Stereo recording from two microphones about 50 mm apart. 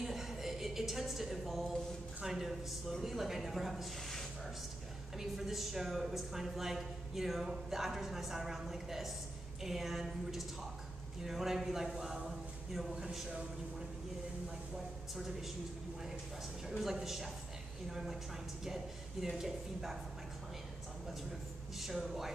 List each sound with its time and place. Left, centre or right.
0.0 s a sound: centre
3.0 s a woman's voice: centre
5.2 s a woman's voice: centre
15.1 s a woman's voice: centre
16.6 s a woman's voice: centre
19.2 s speech: centre
21.7 s a woman's voice: centre